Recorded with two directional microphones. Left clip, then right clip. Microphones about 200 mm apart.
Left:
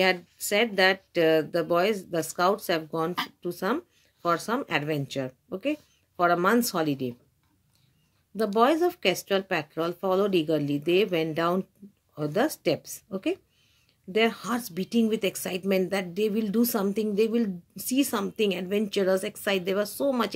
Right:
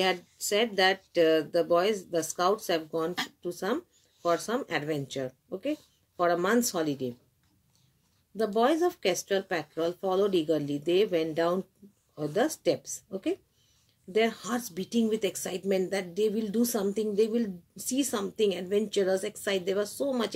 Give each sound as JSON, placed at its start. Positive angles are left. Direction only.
{"t": 0.0, "sound": "speech", "side_deg": 35}
{"t": 8.4, "sound": "speech", "side_deg": 35}